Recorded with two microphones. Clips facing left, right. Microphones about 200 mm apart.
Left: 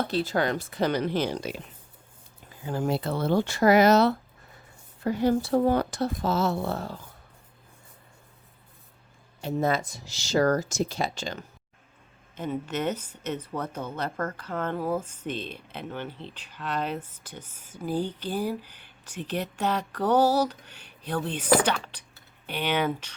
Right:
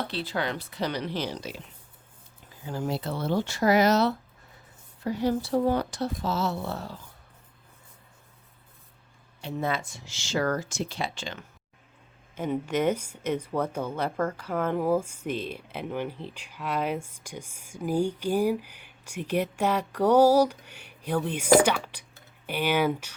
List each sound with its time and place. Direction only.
0.1 s speech: 45° left (ahead or behind)
2.6 s speech: 55° left (ahead or behind)
9.4 s speech: 40° left (ahead or behind)
12.4 s speech: 10° right (ahead or behind)